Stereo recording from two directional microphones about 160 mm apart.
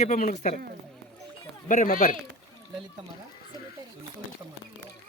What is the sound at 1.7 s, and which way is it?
Speech, 50° left (ahead or behind).